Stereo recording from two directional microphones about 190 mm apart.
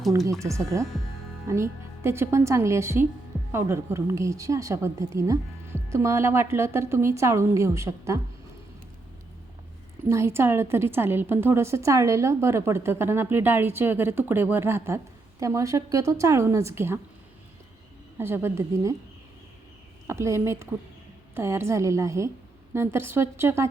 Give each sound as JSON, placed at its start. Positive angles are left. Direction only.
{"t": 0.3, "sound": "a woman's voice", "side_deg": -15}
{"t": 10.1, "sound": "a woman's voice", "side_deg": -15}
{"t": 18.2, "sound": "a woman's voice", "side_deg": -10}
{"t": 20.1, "sound": "a woman's voice", "side_deg": -15}